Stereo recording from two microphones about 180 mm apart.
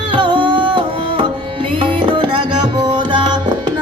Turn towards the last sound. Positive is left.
turn(degrees=-25)  # may be behind; listen again after turning